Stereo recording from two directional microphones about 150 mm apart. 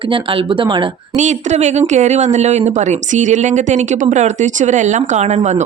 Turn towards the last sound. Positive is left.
turn(degrees=-50)  # may be behind; listen again after turning